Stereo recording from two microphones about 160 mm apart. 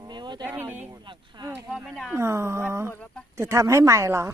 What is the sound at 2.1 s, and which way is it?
Speech, 15° right (ahead or behind).